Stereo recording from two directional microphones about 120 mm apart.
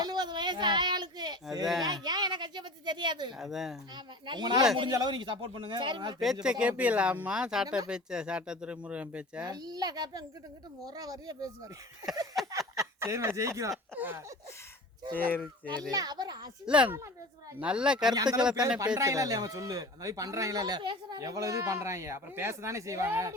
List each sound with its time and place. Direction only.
0.0 s a sound: 35° right (ahead or behind)
3.3 s speech: centre (ahead or behind)
3.9 s speech: 40° right (ahead or behind)
6.4 s speech: 10° right (ahead or behind)
9.4 s speech: 35° right (ahead or behind)
12.5 s a sound: 30° right (ahead or behind)
13.0 s speech: 20° right (ahead or behind)
13.9 s speech: 15° right (ahead or behind)
15.1 s speech: 15° left (ahead or behind)
15.9 s speech: 35° right (ahead or behind)
16.6 s speech: 10° right (ahead or behind)
18.1 s speech: 35° right (ahead or behind)